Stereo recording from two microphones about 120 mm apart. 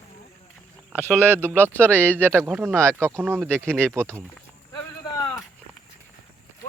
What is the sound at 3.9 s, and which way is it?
Speech, 20° right (ahead or behind).